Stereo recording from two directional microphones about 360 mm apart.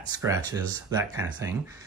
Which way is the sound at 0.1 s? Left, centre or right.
Centre.